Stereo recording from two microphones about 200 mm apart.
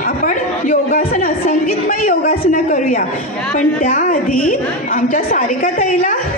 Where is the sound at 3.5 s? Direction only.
40° left (ahead or behind).